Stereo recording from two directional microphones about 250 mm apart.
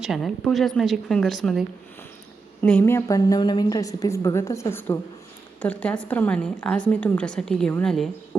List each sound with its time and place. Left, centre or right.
0.0 s a woman's voice: centre